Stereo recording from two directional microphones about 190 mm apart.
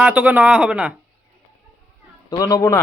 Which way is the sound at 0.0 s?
10° right (ahead or behind).